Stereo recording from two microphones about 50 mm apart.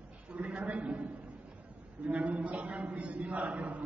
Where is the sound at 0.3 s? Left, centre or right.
Right.